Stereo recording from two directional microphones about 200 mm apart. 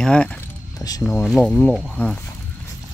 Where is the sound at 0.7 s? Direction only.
20° left (ahead or behind).